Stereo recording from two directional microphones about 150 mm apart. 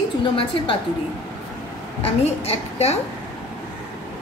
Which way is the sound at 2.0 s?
40° left (ahead or behind).